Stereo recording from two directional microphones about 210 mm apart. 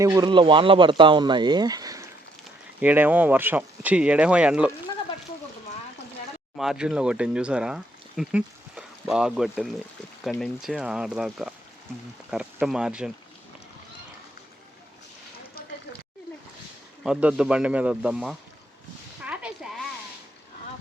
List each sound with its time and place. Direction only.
0.0 s speech: 15° right (ahead or behind)
6.6 s speech: 5° right (ahead or behind)
17.0 s speech: 5° right (ahead or behind)
19.2 s a sound: 5° right (ahead or behind)